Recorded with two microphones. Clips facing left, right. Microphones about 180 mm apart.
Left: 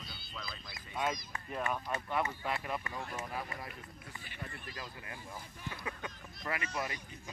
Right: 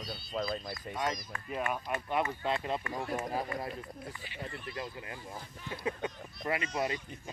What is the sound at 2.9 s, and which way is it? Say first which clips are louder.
Speech: right 6 dB; 35° right (ahead or behind).